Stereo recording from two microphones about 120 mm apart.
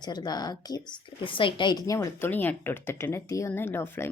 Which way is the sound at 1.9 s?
30° left (ahead or behind).